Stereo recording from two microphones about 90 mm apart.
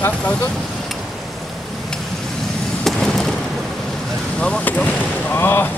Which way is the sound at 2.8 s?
5° left (ahead or behind).